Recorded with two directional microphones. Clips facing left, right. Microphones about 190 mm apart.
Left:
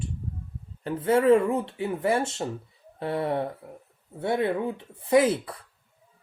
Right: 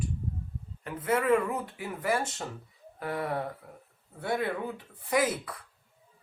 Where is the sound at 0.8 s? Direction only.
30° left (ahead or behind).